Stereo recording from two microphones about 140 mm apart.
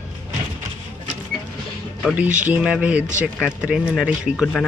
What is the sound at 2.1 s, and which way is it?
Speech, 10° right (ahead or behind).